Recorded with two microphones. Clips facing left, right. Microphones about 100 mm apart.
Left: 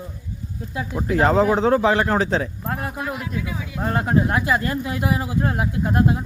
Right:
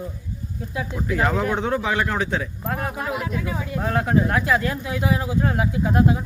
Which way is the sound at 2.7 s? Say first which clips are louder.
Right 1 dB; 5° left (ahead or behind).